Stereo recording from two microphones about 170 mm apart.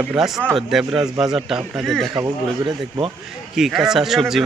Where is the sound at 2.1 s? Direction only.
25° right (ahead or behind).